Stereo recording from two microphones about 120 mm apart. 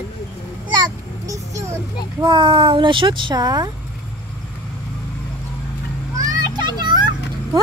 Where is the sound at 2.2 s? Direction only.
45° right (ahead or behind).